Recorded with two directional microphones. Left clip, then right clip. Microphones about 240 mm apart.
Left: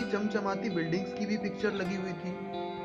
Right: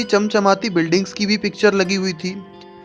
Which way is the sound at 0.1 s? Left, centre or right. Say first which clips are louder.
Right 19 dB; right.